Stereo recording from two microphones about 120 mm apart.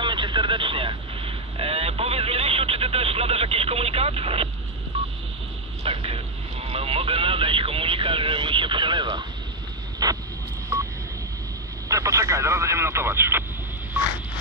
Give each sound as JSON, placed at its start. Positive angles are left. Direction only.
{"t": 0.0, "sound": "vehicle", "side_deg": -40}
{"t": 5.9, "sound": "vehicle", "side_deg": -55}
{"t": 10.7, "sound": "telephone dialing", "side_deg": -20}
{"t": 11.9, "sound": "radio", "side_deg": -25}